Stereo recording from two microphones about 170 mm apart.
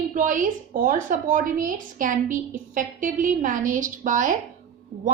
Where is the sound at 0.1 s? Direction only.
50° right (ahead or behind).